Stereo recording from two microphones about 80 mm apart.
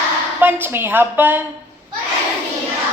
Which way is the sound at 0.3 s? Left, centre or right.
Right.